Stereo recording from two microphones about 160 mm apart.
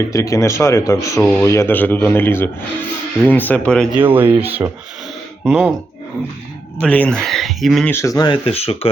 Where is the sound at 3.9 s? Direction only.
10° right (ahead or behind).